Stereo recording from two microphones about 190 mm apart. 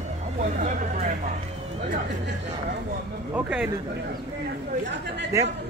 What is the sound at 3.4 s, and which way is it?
Speech, 5° right (ahead or behind).